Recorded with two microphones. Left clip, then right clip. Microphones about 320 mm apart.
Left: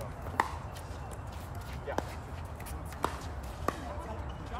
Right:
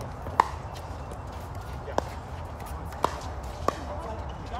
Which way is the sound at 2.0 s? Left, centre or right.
Centre.